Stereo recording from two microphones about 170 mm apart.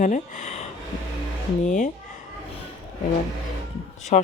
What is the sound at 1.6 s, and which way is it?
Speech, 45° left (ahead or behind).